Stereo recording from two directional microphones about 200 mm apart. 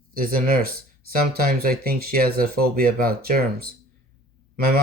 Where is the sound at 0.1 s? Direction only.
45° right (ahead or behind).